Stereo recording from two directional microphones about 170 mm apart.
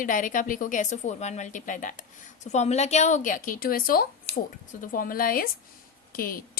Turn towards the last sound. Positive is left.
turn(degrees=60)  # may be behind; listen again after turning